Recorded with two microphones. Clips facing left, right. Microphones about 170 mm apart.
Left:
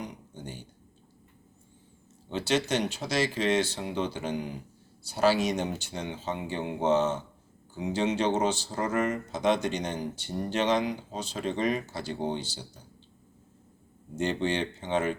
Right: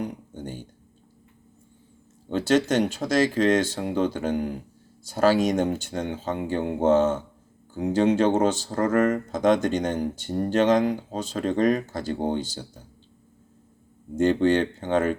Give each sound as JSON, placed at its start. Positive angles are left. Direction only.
{"t": 0.0, "sound": "a sound", "side_deg": -50}
{"t": 2.3, "sound": "speech", "side_deg": -50}
{"t": 14.2, "sound": "speech", "side_deg": -50}